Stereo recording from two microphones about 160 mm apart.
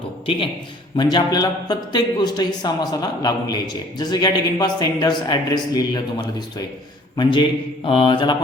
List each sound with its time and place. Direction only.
1.1 s speech: 25° left (ahead or behind)
7.2 s speech: 30° left (ahead or behind)
7.9 s mantra: 30° left (ahead or behind)